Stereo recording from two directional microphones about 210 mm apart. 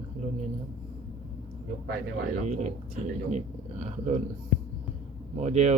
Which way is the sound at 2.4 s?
35° right (ahead or behind).